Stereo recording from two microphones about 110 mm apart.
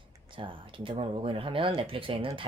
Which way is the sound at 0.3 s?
50° right (ahead or behind).